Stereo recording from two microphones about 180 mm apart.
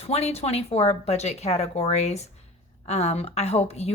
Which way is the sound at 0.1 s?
35° left (ahead or behind).